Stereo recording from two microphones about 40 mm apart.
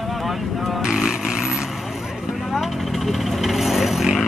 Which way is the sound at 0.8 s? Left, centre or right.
Centre.